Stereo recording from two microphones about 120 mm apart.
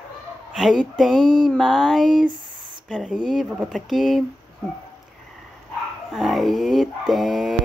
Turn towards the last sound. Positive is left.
turn(degrees=0)  # may be behind; listen again after turning